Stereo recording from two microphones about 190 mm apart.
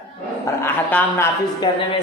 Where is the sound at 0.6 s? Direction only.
10° left (ahead or behind).